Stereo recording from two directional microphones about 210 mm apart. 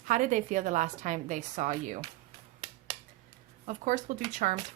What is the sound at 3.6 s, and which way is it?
Speech, 35° right (ahead or behind).